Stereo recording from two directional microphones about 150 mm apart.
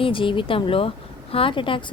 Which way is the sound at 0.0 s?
35° left (ahead or behind).